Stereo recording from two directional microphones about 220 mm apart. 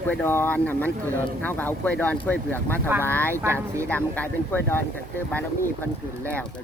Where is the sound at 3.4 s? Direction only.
10° right (ahead or behind).